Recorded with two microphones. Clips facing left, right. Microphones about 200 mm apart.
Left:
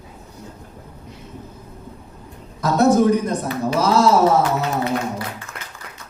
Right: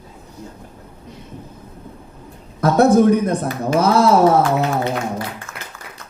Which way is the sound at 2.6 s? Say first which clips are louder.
Right 3 dB; 55° right (ahead or behind).